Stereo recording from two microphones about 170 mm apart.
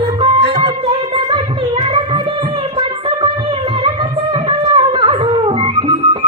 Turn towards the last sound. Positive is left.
turn(degrees=-30)  # may be behind; listen again after turning